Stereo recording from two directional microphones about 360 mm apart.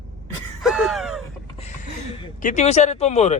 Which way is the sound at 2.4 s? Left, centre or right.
Centre.